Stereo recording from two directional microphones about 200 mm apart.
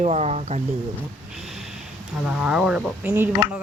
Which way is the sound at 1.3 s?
Centre (ahead or behind).